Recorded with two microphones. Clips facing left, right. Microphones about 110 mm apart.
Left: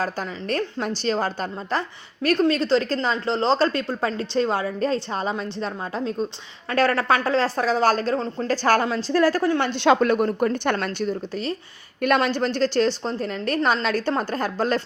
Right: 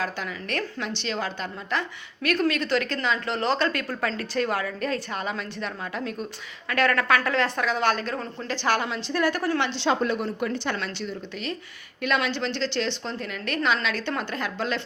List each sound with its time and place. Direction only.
0.0 s a woman's voice: 35° left (ahead or behind)
9.6 s a woman's voice: 50° left (ahead or behind)